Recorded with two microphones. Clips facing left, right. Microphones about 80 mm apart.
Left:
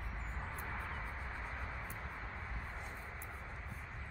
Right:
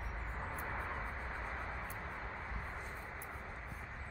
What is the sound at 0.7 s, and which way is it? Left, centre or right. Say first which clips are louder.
Music: right 3 dB; centre.